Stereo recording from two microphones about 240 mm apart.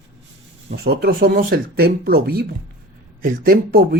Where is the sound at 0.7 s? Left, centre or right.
Right.